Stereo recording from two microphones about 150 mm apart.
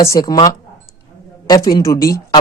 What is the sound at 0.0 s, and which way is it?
Speech, 25° left (ahead or behind).